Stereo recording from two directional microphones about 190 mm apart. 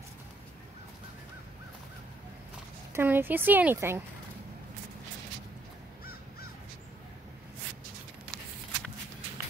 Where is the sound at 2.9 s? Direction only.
10° right (ahead or behind).